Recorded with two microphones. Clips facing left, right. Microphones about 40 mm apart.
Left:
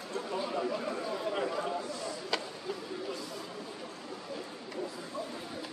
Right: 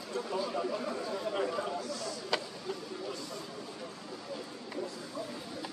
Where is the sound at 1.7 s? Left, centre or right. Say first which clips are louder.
Left 1 dB; left.